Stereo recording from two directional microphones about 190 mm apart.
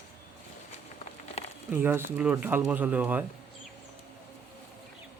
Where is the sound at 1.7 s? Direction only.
10° right (ahead or behind).